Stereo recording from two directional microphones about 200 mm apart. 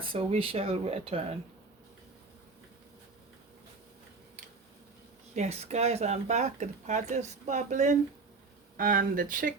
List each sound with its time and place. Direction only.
0.0 s speech: 25° right (ahead or behind)
5.3 s speech: 35° right (ahead or behind)